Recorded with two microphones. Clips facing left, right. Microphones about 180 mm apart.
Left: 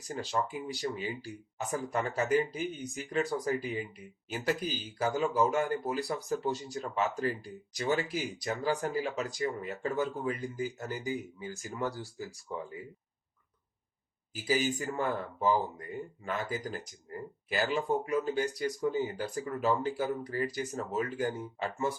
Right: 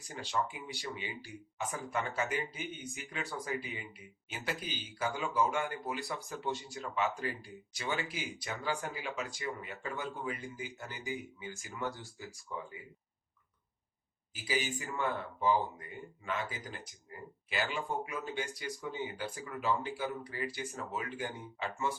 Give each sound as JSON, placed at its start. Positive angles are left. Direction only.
{"t": 0.1, "sound": "speech", "side_deg": 40}
{"t": 14.4, "sound": "speech", "side_deg": 45}